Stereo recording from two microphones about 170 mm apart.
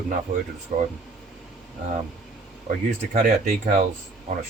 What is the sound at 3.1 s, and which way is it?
Speech, 50° right (ahead or behind).